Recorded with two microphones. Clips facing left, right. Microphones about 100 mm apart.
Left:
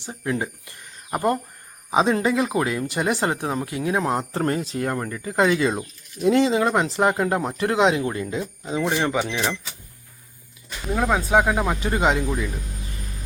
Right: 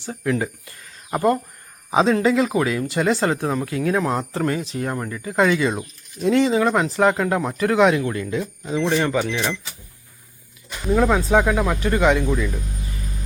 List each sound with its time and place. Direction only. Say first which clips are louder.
0.0 s speech: right 3 dB; 20° left (ahead or behind)
8.8 s speech: right 2 dB; 15° left (ahead or behind)
10.9 s speech: right 2 dB; 5° left (ahead or behind); by 12.2 s 25° left (ahead or behind)